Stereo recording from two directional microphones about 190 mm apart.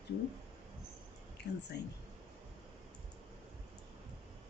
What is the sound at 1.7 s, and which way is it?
Speech, 55° left (ahead or behind).